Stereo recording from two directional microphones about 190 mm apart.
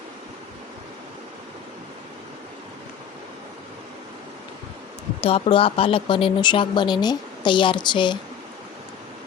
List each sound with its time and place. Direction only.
5.2 s speech: 30° left (ahead or behind)